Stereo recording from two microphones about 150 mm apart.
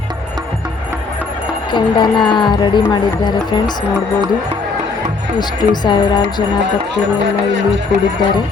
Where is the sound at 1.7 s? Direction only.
30° left (ahead or behind).